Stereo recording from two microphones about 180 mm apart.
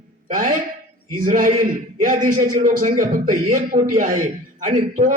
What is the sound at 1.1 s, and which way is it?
A man's voice, 50° right (ahead or behind).